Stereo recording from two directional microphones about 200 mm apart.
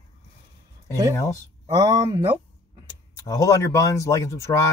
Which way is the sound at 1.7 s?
20° right (ahead or behind).